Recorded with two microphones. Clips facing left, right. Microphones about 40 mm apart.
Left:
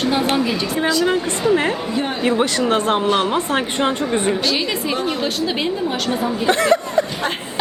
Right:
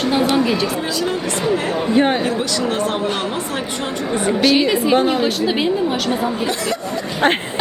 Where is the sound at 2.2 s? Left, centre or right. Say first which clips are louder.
Left 2 dB; left.